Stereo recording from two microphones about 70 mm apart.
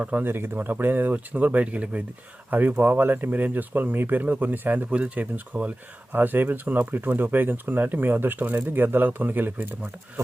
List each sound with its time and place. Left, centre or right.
0.0 s speech: centre
0.3 s speech: right